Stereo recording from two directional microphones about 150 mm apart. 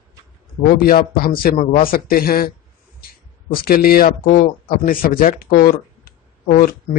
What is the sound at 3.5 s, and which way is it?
A man's voice, 80° left.